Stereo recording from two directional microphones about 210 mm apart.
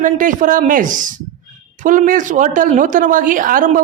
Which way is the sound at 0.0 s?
40° right (ahead or behind).